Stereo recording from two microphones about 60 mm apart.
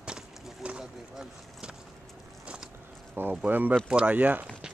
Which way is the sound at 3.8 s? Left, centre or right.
Centre.